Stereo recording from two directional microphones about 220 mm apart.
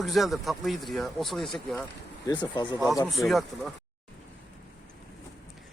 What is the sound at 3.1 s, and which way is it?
Speech, centre (ahead or behind).